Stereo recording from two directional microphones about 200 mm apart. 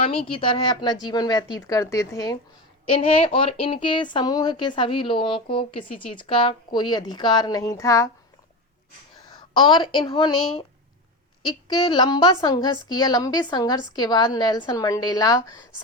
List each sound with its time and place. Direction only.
0.3 s speech: 25° left (ahead or behind)
2.9 s speech: 30° left (ahead or behind)
9.3 s speech: 20° left (ahead or behind)